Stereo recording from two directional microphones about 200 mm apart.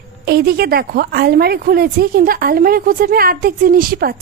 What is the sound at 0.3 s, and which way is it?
A woman's voice, 50° right (ahead or behind).